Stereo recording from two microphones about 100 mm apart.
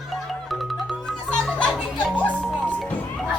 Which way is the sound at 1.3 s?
10° left (ahead or behind).